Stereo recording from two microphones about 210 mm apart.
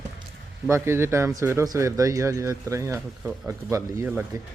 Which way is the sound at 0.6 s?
10° right (ahead or behind).